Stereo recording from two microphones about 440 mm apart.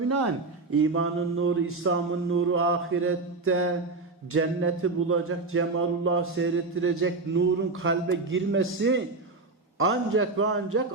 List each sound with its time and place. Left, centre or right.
0.1 s speech: right